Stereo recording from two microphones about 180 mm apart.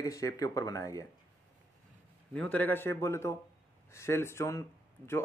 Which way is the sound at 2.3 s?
5° left (ahead or behind).